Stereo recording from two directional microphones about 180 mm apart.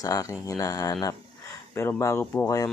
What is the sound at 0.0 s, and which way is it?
Speech, 20° left (ahead or behind).